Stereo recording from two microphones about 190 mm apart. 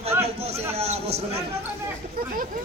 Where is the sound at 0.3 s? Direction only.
35° right (ahead or behind).